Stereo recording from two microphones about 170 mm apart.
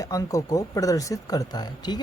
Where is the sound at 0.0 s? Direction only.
20° left (ahead or behind).